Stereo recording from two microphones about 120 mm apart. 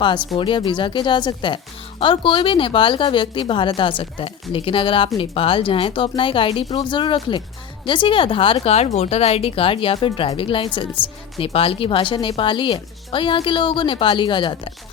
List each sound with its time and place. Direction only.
0.3 s speech: 45° left (ahead or behind)
8.6 s speech: 60° left (ahead or behind); by 14.7 s 45° left (ahead or behind)